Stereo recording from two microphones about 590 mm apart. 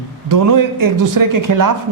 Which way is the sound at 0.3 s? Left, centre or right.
Right.